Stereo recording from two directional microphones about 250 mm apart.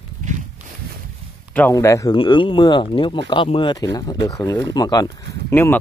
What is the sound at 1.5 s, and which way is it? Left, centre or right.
Speech, centre.